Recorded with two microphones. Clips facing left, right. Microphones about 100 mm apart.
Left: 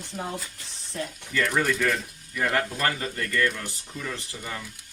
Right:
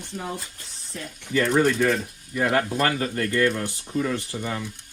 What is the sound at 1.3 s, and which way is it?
Speech, 30° right (ahead or behind).